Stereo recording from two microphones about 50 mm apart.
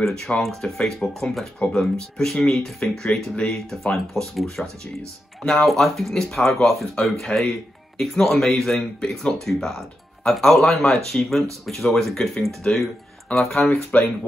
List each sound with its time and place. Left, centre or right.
0.1 s speech: centre
0.4 s speech: centre
5.7 s speech: centre
13.9 s speech: left